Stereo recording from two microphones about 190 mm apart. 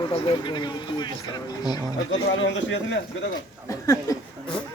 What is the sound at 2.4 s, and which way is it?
Speech, 80° left.